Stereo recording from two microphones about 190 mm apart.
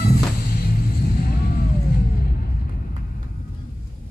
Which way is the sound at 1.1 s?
50° left (ahead or behind).